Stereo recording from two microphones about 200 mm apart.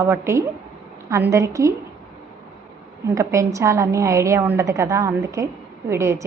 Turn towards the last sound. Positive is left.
turn(degrees=-15)  # may be behind; listen again after turning